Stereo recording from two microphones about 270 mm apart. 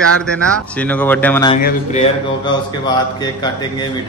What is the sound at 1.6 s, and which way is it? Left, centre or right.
Speech, left.